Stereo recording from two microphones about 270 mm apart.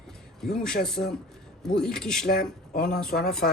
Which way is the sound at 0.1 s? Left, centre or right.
Centre.